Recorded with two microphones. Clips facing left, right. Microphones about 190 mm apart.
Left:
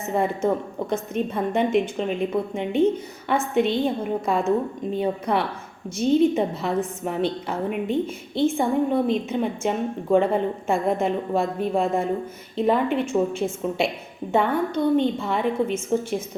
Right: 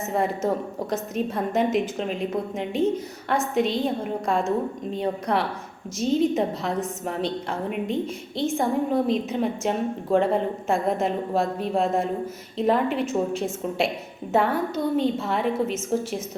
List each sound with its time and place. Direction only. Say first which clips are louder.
0.0 s a woman's voice: left 2 dB; centre (ahead or behind)